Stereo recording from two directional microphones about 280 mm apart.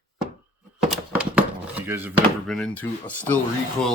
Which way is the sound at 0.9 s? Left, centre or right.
Centre.